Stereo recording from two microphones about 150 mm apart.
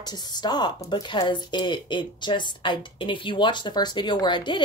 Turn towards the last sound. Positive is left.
turn(degrees=30)  # may be behind; listen again after turning